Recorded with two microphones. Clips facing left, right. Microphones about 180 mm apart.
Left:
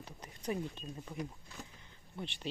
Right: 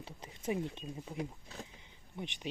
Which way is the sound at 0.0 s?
25° right (ahead or behind).